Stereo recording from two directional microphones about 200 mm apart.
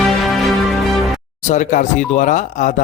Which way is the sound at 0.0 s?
Centre (ahead or behind).